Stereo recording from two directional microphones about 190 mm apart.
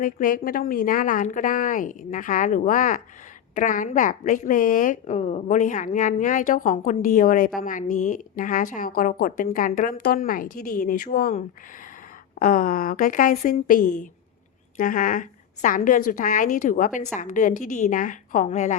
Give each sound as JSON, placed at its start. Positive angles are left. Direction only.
{"t": 0.0, "sound": "a woman's voice", "side_deg": 45}
{"t": 12.4, "sound": "a woman's voice", "side_deg": 45}